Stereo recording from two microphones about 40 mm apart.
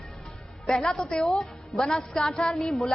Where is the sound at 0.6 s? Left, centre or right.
Centre.